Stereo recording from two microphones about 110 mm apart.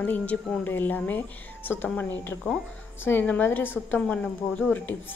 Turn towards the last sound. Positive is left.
turn(degrees=15)  # may be behind; listen again after turning